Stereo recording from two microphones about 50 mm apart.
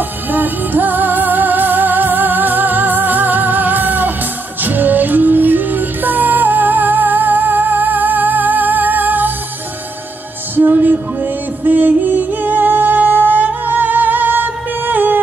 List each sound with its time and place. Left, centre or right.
0.3 s music: right
10.5 s music: right